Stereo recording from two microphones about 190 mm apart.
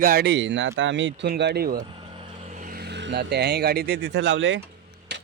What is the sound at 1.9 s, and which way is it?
Vehicle, 25° right (ahead or behind).